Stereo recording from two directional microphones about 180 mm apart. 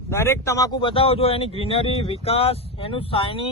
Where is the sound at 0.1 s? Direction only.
15° left (ahead or behind).